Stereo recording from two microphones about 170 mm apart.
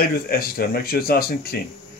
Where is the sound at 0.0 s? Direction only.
60° left (ahead or behind).